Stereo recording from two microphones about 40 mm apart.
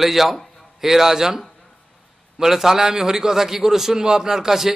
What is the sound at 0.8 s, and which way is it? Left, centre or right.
A man's voice, centre.